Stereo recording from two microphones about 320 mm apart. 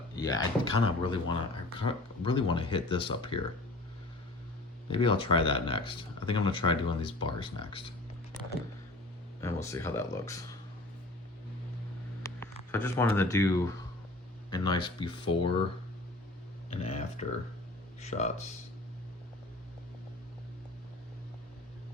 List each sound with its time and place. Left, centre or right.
0.2 s speech: centre
4.9 s speech: centre
9.4 s speech: centre
12.2 s a sound: centre
14.5 s speech: centre
16.6 s a sound: centre
18.0 s speech: left